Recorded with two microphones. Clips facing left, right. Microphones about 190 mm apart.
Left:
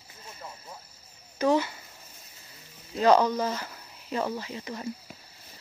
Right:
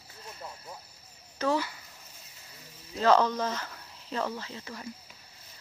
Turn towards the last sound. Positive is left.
turn(degrees=15)  # may be behind; listen again after turning